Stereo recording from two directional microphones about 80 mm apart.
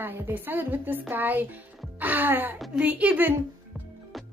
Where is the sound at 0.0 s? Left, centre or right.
Right.